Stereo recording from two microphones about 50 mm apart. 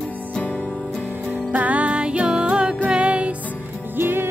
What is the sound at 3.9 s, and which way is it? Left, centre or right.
Music, right.